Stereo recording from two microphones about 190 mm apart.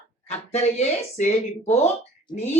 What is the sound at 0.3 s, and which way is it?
A woman's voice, 35° left (ahead or behind).